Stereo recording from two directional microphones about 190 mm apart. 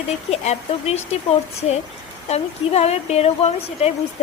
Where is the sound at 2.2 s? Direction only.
35° left (ahead or behind).